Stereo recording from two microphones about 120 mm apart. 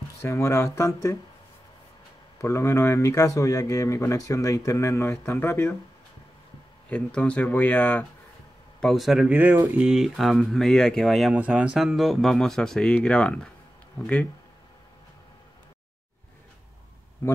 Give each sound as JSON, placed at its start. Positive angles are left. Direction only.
{"t": 0.2, "sound": "speech", "side_deg": 25}
{"t": 2.4, "sound": "speech", "side_deg": 25}
{"t": 6.9, "sound": "speech", "side_deg": 10}
{"t": 8.8, "sound": "speech", "side_deg": 0}
{"t": 9.3, "sound": "speech", "side_deg": -15}
{"t": 9.8, "sound": "speech", "side_deg": -5}
{"t": 11.3, "sound": "speech", "side_deg": -10}